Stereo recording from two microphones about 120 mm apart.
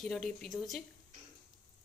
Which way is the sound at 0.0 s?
5° left (ahead or behind).